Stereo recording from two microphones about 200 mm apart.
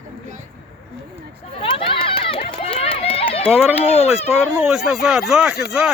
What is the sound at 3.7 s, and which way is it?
Speech, 30° left (ahead or behind).